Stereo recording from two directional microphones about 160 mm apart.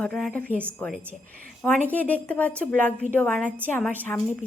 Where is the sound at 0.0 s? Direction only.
5° left (ahead or behind).